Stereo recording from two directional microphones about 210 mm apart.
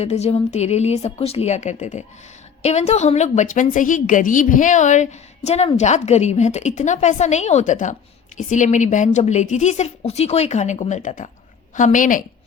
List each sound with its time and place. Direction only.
0.0 s a woman's voice: 30° left (ahead or behind)